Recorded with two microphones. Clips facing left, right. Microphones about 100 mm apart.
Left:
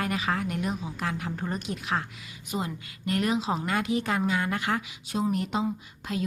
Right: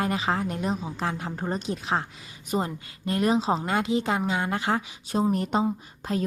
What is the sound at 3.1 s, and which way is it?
A woman's voice, 30° right (ahead or behind).